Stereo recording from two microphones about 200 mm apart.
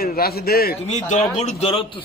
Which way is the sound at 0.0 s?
50° left (ahead or behind).